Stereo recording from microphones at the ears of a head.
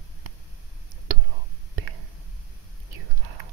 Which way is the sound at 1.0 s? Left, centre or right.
Right.